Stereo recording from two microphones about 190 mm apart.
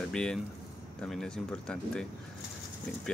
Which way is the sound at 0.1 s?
5° left (ahead or behind).